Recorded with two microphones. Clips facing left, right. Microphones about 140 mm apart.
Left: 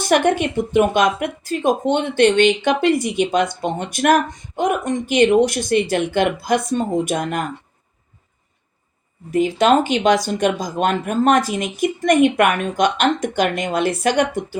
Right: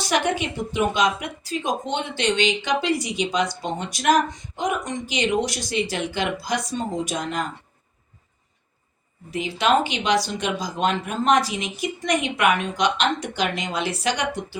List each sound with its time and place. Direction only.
0.0 s speech: 55° left (ahead or behind)
9.3 s speech: 45° left (ahead or behind)